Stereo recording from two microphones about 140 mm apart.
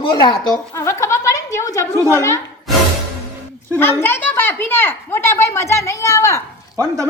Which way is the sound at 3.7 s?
15° left (ahead or behind).